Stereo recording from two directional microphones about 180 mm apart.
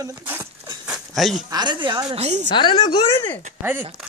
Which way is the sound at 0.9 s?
Centre (ahead or behind).